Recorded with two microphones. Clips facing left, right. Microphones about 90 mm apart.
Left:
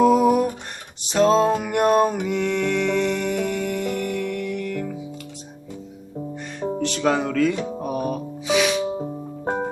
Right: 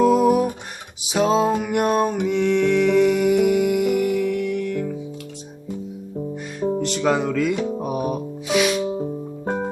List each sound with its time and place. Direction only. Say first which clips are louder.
0.0 s music: even; centre (ahead or behind)
1.0 s a sound: left 1 dB; 5° right (ahead or behind)
6.8 s music: left 1 dB; 5° right (ahead or behind)
8.8 s music: right 2 dB; 15° left (ahead or behind)